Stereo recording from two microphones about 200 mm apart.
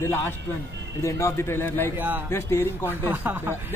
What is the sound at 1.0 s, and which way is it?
Speech, 15° left (ahead or behind).